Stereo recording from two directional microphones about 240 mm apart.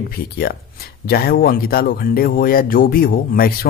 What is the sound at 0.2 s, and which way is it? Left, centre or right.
Speech, left.